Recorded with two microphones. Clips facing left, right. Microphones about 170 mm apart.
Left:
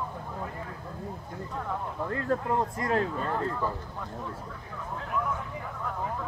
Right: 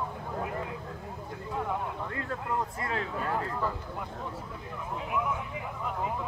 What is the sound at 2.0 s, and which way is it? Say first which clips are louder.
Speech: left 6 dB; 40° left (ahead or behind).